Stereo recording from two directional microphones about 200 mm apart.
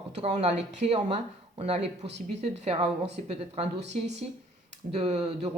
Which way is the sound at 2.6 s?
30° right (ahead or behind).